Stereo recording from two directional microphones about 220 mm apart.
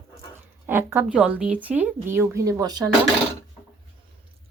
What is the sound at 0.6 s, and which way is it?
A woman's voice, 10° right (ahead or behind).